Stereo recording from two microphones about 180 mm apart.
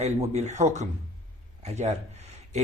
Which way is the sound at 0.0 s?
40° right (ahead or behind).